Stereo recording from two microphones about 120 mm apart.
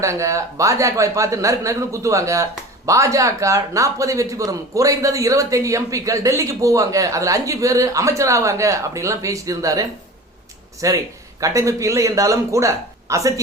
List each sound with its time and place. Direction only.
0.0 s speech: 25° right (ahead or behind)